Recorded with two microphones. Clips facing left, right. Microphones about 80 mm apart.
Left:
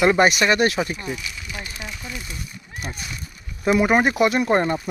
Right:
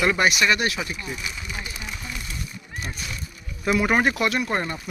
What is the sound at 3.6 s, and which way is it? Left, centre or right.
Speech, centre.